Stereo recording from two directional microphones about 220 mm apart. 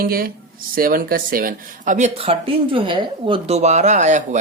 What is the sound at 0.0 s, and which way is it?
Speech, 40° right (ahead or behind).